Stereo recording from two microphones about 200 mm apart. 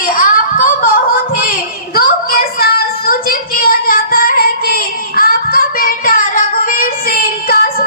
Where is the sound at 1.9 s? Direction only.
45° left (ahead or behind).